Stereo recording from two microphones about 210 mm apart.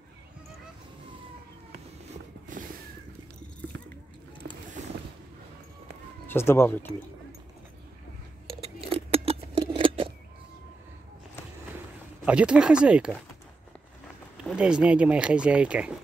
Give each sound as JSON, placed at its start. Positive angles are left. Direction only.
{"t": 4.8, "sound": "boat", "side_deg": -35}
{"t": 6.2, "sound": "speech", "side_deg": 10}
{"t": 8.8, "sound": "scissors", "side_deg": -25}
{"t": 12.3, "sound": "speech", "side_deg": -5}
{"t": 14.3, "sound": "speech", "side_deg": -5}